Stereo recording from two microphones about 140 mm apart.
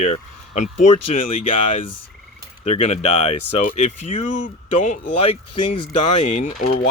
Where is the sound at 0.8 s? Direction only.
65° left (ahead or behind).